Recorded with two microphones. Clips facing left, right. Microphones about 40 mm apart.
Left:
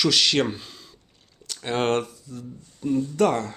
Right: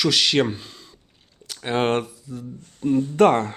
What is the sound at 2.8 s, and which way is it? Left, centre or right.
Speech, right.